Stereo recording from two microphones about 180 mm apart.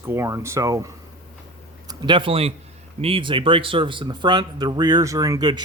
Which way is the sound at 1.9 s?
25° right (ahead or behind).